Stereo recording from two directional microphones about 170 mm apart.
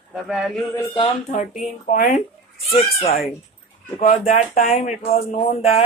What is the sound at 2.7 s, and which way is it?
Speech, 35° left (ahead or behind).